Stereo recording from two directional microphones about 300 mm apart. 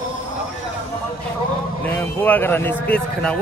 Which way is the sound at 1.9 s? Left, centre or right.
Centre.